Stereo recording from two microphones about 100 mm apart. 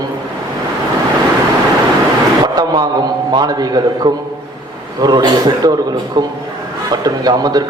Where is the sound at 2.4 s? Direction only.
40° right (ahead or behind).